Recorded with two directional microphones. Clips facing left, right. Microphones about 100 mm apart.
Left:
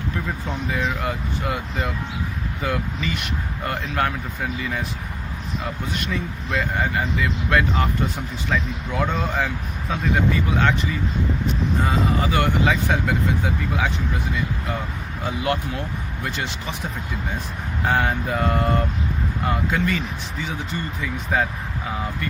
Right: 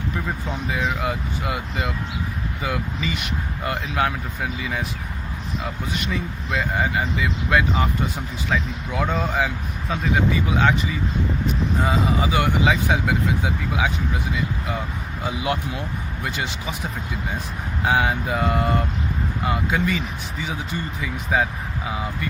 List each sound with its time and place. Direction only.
0.4 s speech: 10° right (ahead or behind)
6.5 s speech: 10° right (ahead or behind)
11.9 s speech: 10° right (ahead or behind)
15.2 s speech: 5° right (ahead or behind)
17.8 s speech: 5° right (ahead or behind)
21.0 s speech: 10° right (ahead or behind)